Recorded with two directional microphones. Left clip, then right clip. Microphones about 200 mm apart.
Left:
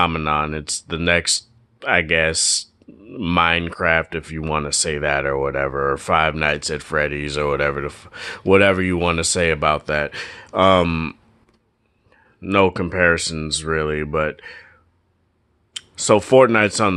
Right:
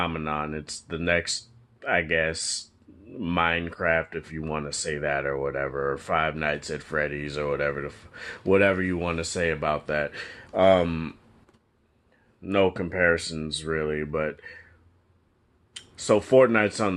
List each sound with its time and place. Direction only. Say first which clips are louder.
0.0 s speech: left 10 dB; 45° left (ahead or behind)
12.4 s speech: left 6 dB; 45° left (ahead or behind)
15.7 s speech: left 7 dB; 40° left (ahead or behind)